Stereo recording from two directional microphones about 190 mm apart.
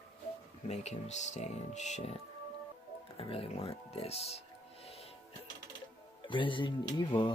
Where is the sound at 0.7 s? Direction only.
35° left (ahead or behind).